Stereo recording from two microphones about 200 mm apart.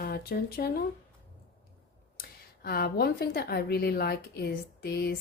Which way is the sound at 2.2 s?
50° left (ahead or behind).